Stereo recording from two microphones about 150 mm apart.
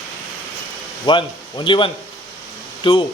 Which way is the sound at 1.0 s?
30° left (ahead or behind).